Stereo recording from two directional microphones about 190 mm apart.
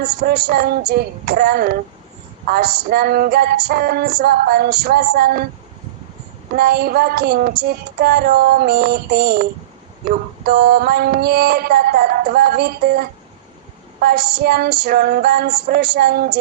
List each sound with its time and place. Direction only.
0.0 s music: 55° right (ahead or behind)
6.6 s a sound: 55° right (ahead or behind)
8.0 s music: 55° right (ahead or behind)